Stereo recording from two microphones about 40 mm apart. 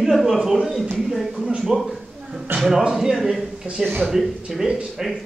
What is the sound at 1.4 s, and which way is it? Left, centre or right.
Speech, centre.